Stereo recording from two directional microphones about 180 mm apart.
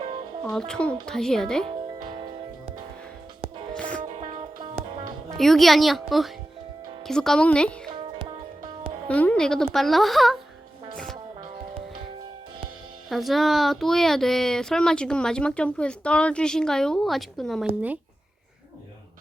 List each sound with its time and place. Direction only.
0.4 s speech: 5° left (ahead or behind)
1.6 s music: 25° right (ahead or behind)
3.8 s music: 5° left (ahead or behind)
4.2 s music: 35° right (ahead or behind)
5.4 s speech: centre (ahead or behind)
7.9 s music: 25° right (ahead or behind)
9.0 s speech: 10° left (ahead or behind)
10.9 s music: 5° left (ahead or behind)
13.1 s speech: centre (ahead or behind)